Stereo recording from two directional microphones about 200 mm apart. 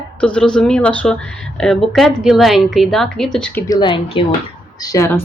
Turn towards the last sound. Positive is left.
turn(degrees=15)  # may be behind; listen again after turning